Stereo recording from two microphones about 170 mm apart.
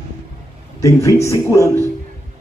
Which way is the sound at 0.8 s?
20° left (ahead or behind).